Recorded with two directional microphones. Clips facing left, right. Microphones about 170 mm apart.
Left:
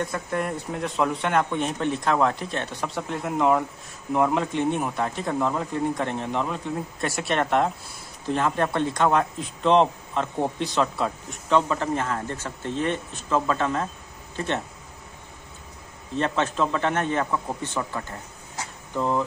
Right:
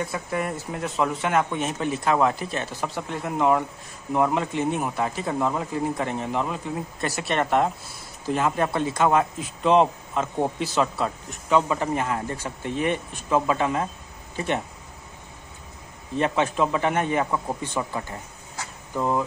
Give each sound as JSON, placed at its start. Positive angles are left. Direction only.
{"t": 0.0, "sound": "speech", "side_deg": -5}
{"t": 16.2, "sound": "a man's voice", "side_deg": -10}